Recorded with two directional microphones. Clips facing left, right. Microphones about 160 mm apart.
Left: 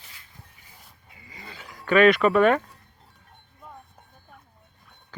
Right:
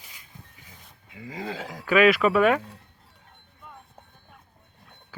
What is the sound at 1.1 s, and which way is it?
Speech, 90° right.